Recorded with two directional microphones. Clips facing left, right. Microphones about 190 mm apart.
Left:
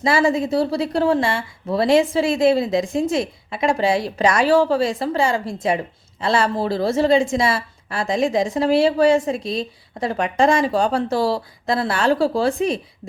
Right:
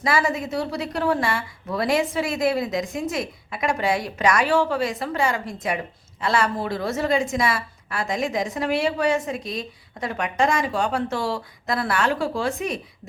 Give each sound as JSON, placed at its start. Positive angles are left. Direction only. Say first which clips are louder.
{"t": 0.0, "sound": "a woman's voice", "louder": "left 5 dB", "side_deg": 30}